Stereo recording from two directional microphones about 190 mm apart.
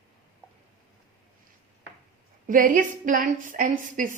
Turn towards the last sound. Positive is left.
turn(degrees=-45)  # may be behind; listen again after turning